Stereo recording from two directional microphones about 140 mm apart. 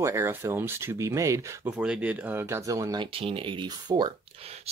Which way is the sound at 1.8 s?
10° right (ahead or behind).